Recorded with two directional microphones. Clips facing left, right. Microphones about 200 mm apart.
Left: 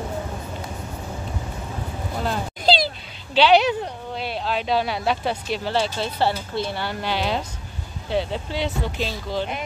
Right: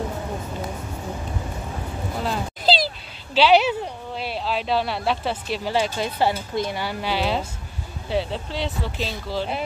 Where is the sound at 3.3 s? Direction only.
5° right (ahead or behind).